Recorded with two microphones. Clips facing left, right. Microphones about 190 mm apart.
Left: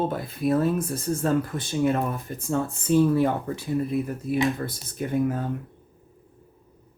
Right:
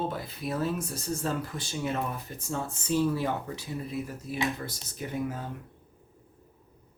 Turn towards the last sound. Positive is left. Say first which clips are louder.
# left 8 dB
turn(degrees=55)  # may be behind; listen again after turning